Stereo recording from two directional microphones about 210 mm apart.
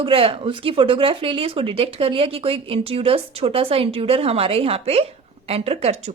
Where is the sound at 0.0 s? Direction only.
25° right (ahead or behind).